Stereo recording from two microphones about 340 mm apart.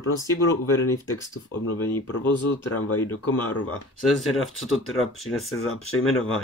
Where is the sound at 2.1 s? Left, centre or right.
Left.